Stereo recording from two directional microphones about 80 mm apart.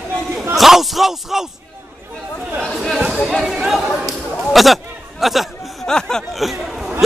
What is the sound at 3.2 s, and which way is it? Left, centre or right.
Speech, centre.